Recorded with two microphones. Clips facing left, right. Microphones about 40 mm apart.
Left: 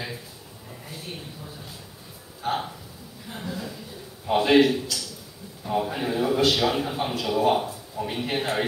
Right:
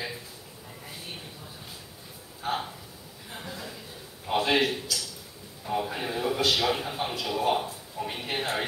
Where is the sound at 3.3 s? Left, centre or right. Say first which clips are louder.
Left 5 dB; centre.